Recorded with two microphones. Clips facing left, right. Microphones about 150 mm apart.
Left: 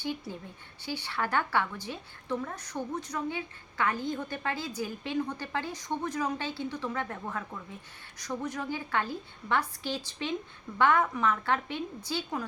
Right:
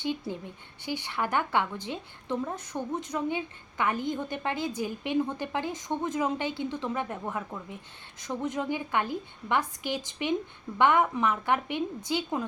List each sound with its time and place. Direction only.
0.0 s a woman's voice: 20° right (ahead or behind)